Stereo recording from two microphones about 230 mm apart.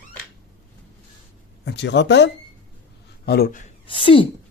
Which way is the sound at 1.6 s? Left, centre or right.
Left.